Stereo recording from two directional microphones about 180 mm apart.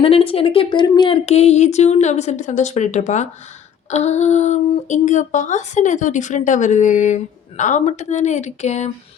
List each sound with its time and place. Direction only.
0.0 s speech: 30° left (ahead or behind)